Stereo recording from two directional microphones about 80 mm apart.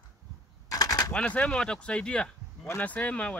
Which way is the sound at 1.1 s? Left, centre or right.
Centre.